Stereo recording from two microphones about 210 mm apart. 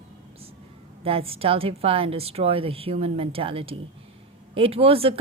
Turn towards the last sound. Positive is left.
turn(degrees=-25)  # may be behind; listen again after turning